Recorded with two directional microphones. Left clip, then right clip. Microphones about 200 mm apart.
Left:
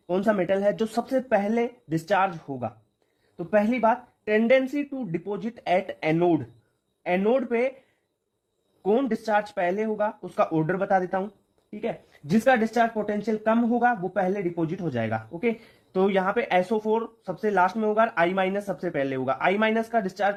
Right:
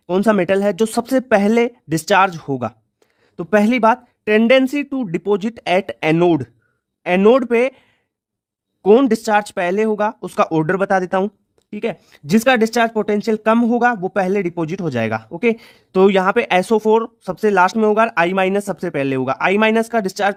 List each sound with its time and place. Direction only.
0.1 s speech: 50° right (ahead or behind)
8.8 s speech: 50° right (ahead or behind)